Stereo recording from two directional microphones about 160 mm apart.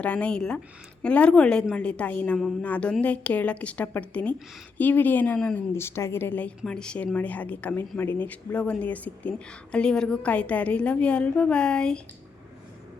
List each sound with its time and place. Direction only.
0.0 s a woman's voice: 10° left (ahead or behind)